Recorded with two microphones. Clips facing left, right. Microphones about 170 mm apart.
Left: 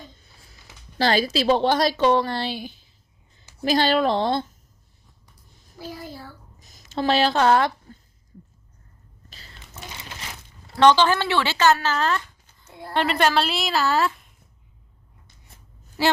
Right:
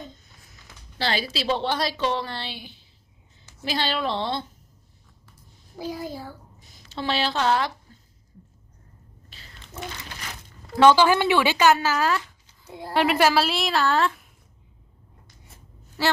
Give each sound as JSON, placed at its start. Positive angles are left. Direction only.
{"t": 0.2, "sound": "a sound", "side_deg": 30}
{"t": 0.9, "sound": "a woman's voice", "side_deg": 45}
{"t": 5.7, "sound": "a child's voice", "side_deg": -20}
{"t": 6.6, "sound": "a woman's voice", "side_deg": 45}
{"t": 9.3, "sound": "a sound", "side_deg": 40}
{"t": 10.8, "sound": "a woman's voice", "side_deg": -10}
{"t": 16.0, "sound": "speech", "side_deg": 10}